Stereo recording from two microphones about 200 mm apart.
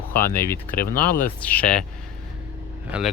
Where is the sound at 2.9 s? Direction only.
5° right (ahead or behind).